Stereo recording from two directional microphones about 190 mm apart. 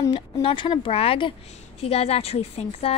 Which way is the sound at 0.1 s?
25° left (ahead or behind).